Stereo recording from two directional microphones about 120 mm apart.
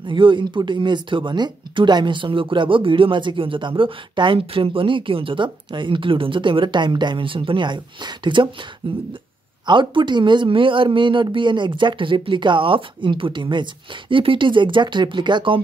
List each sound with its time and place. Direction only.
0.0 s speech: 45° right (ahead or behind)